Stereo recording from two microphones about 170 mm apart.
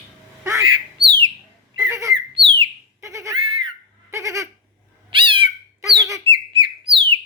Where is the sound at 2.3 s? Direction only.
30° right (ahead or behind).